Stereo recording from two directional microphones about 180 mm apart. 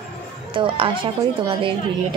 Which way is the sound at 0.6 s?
30° right (ahead or behind).